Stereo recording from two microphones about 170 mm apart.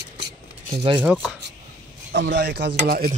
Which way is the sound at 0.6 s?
30° right (ahead or behind).